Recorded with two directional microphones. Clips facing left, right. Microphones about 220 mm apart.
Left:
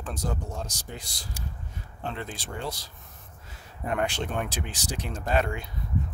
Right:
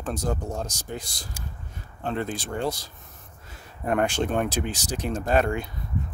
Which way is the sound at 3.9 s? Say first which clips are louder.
Right 5 dB; 45° right (ahead or behind).